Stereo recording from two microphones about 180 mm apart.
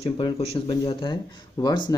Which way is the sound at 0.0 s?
35° left (ahead or behind).